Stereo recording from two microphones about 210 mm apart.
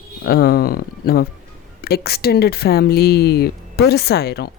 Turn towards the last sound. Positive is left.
turn(degrees=50)  # may be behind; listen again after turning